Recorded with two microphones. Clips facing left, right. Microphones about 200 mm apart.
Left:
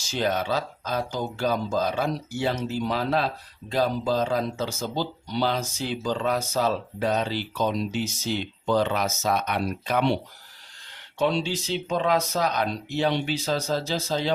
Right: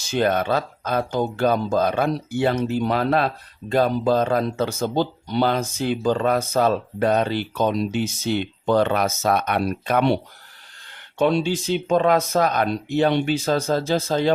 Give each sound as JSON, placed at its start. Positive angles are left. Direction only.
{"t": 0.0, "sound": "speech", "side_deg": -60}
{"t": 11.2, "sound": "speech", "side_deg": -55}